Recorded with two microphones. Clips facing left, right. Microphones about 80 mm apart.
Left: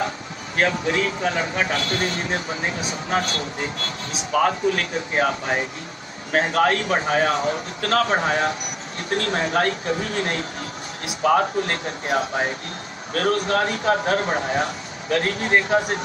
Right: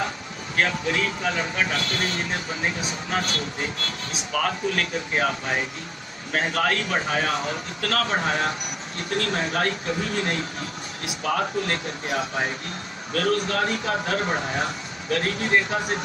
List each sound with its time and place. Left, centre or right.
0.6 s a man's voice: left